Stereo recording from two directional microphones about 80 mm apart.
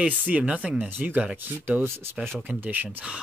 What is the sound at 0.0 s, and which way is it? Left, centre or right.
Speech, centre.